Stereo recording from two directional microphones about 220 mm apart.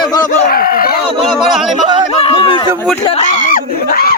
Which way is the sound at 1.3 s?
Centre (ahead or behind).